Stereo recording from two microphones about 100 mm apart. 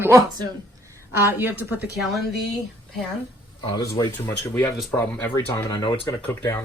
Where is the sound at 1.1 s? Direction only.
25° right (ahead or behind).